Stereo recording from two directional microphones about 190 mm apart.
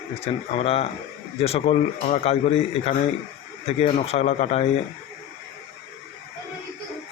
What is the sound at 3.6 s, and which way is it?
A man's voice, 30° left (ahead or behind).